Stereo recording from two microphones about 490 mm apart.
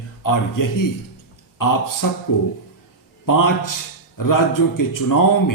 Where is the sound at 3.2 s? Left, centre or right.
Left.